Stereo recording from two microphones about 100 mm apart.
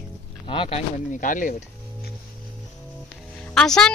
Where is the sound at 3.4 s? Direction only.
5° left (ahead or behind).